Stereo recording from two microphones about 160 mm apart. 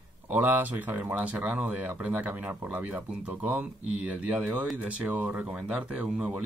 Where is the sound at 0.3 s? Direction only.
10° right (ahead or behind).